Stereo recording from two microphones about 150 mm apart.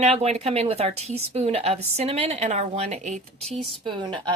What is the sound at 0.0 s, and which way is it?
Speech, 45° right (ahead or behind).